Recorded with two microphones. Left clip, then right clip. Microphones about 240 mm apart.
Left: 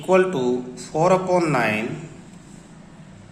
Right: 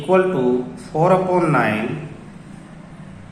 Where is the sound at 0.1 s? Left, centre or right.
Left.